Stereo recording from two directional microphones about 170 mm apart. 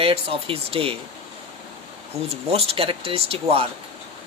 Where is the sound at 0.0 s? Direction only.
35° right (ahead or behind).